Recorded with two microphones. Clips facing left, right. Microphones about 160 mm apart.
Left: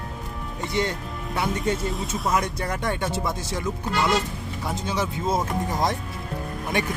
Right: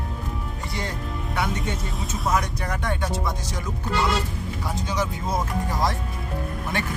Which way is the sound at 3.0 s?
25° left (ahead or behind).